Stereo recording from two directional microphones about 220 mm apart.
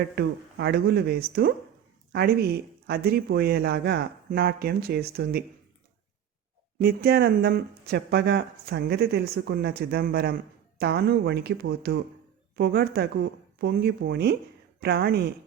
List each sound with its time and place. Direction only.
0.2 s speech: 50° right (ahead or behind)
6.7 s speech: 45° right (ahead or behind)